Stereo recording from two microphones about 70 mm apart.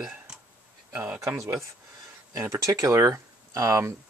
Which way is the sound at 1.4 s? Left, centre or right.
Right.